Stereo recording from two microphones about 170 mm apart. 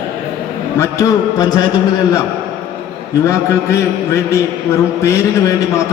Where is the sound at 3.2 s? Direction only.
15° left (ahead or behind).